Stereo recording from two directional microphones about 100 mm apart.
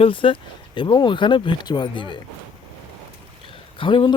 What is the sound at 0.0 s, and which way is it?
Speech, 60° left (ahead or behind).